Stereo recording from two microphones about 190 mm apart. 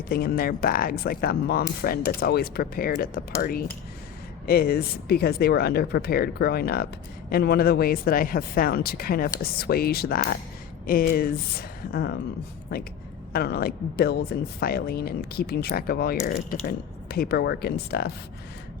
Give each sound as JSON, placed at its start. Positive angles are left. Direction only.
{"t": 0.1, "sound": "a woman's voice", "side_deg": 50}
{"t": 13.3, "sound": "a woman's voice", "side_deg": 55}